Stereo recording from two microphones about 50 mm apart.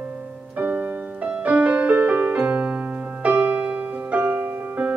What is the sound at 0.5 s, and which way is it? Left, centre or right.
Music, right.